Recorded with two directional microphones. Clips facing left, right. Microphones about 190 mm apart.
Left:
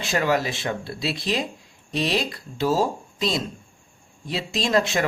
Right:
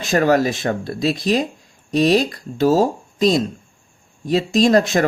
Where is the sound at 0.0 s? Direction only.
45° right (ahead or behind).